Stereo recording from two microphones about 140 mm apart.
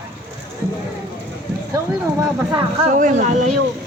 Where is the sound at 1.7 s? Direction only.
25° right (ahead or behind).